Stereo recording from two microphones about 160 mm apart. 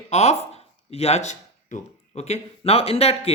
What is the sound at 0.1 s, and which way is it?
Speech, 45° left (ahead or behind).